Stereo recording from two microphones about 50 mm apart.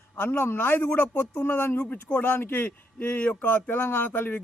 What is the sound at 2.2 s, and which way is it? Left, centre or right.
Speech, left.